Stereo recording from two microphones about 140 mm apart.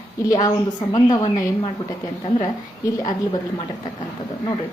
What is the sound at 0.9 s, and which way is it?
Speech, 30° left (ahead or behind).